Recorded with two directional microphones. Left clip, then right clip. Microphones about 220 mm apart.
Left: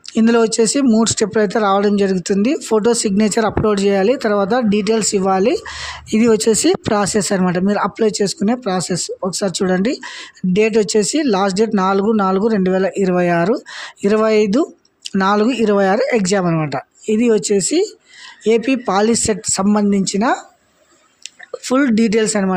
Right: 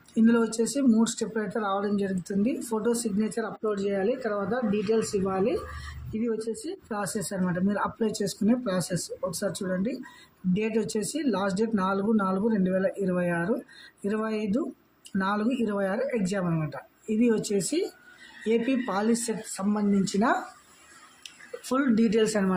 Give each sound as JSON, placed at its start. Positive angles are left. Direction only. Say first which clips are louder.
{"t": 0.1, "sound": "speech", "louder": "left 11 dB", "side_deg": 40}
{"t": 21.6, "sound": "speech", "louder": "left 10 dB", "side_deg": 35}